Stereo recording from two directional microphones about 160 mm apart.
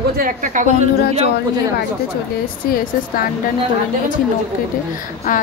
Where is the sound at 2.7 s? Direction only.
65° left (ahead or behind).